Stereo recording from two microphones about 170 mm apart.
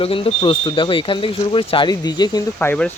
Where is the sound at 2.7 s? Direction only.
10° left (ahead or behind).